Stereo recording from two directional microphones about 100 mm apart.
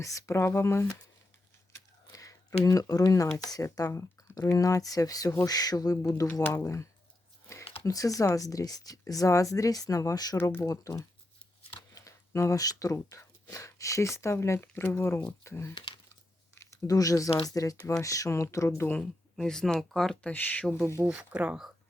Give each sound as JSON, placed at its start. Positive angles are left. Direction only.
{"t": 0.0, "sound": "speech", "side_deg": 30}
{"t": 2.1, "sound": "a sound", "side_deg": 35}
{"t": 2.6, "sound": "speech", "side_deg": 35}
{"t": 7.9, "sound": "speech", "side_deg": 35}
{"t": 15.7, "sound": "speech", "side_deg": 55}
{"t": 16.8, "sound": "speech", "side_deg": 35}
{"t": 18.9, "sound": "speech", "side_deg": 5}
{"t": 20.3, "sound": "speech", "side_deg": 15}
{"t": 21.1, "sound": "speech", "side_deg": -15}